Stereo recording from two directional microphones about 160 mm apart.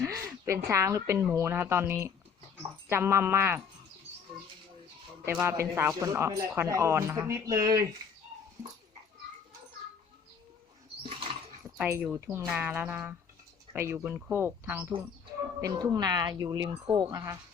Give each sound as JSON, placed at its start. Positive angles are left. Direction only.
{"t": 0.4, "sound": "a woman's voice", "side_deg": -20}
{"t": 5.2, "sound": "a woman's voice", "side_deg": -15}
{"t": 11.9, "sound": "a woman's voice", "side_deg": -15}
{"t": 15.6, "sound": "speech", "side_deg": -25}